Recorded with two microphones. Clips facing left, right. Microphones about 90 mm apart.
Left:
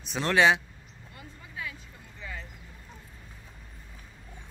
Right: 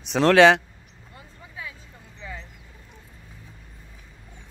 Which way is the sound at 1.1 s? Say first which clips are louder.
Right 1 dB; 25° right (ahead or behind).